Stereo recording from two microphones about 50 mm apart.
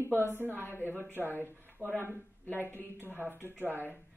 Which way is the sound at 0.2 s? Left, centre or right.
Right.